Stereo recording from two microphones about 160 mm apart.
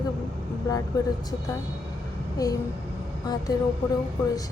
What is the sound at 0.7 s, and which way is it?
A woman's voice, 25° left (ahead or behind).